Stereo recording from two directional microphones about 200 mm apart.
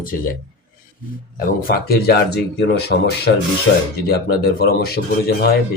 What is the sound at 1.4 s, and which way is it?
Speech, 50° left (ahead or behind).